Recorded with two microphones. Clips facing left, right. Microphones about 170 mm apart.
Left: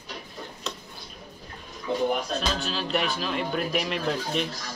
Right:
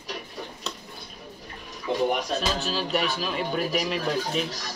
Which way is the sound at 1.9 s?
70° right (ahead or behind).